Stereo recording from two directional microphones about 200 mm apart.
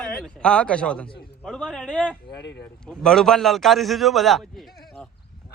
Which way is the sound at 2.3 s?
55° left (ahead or behind).